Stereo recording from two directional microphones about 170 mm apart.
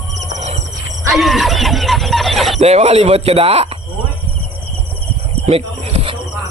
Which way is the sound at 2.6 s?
40° right (ahead or behind).